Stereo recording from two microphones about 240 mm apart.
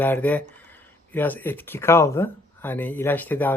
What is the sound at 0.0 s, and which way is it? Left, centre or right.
Speech, centre.